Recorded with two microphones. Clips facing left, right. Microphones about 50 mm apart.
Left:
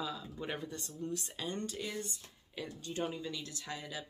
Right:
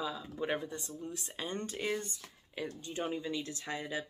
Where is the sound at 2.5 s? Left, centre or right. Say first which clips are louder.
Right 2 dB; right.